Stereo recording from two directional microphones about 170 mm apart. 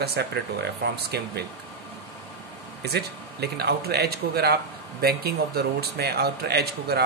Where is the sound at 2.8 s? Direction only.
70° right (ahead or behind).